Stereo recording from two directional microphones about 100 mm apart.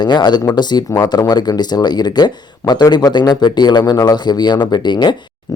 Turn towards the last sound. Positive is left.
turn(degrees=50)  # may be behind; listen again after turning